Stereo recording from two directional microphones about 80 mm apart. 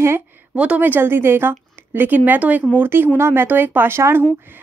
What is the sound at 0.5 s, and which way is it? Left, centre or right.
A woman's voice, centre.